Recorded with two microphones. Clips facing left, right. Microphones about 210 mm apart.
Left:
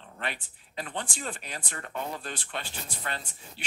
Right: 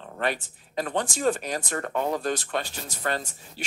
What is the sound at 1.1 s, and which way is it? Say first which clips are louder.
Speech: right 13 dB; 45° right (ahead or behind).